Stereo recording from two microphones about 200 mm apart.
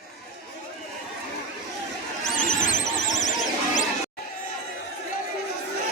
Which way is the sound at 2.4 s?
40° left (ahead or behind).